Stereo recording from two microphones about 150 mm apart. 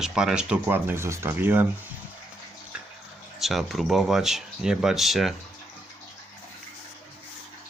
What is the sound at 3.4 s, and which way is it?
Speech, centre (ahead or behind).